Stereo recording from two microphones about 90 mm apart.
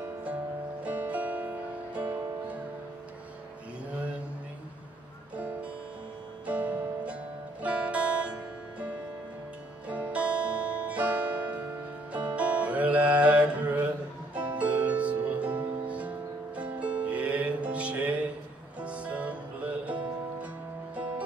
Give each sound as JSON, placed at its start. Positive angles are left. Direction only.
{"t": 0.8, "sound": "music", "side_deg": -15}
{"t": 5.3, "sound": "music", "side_deg": -15}